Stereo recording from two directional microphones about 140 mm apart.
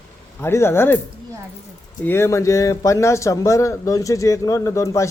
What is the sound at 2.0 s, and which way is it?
Speech, 15° left (ahead or behind).